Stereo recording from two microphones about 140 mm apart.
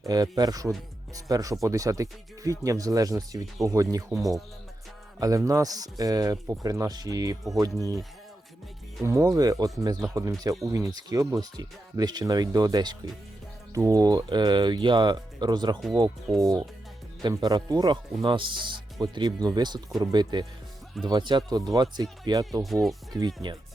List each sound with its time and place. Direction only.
0.0 s speech: 25° right (ahead or behind)
4.2 s speech: centre (ahead or behind)
5.2 s speech: 25° right (ahead or behind)
9.0 s speech: 25° right (ahead or behind)
22.6 s speech: centre (ahead or behind)
23.1 s speech: 30° right (ahead or behind)